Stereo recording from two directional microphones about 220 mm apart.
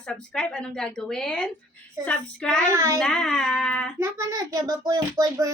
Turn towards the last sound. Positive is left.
turn(degrees=-15)  # may be behind; listen again after turning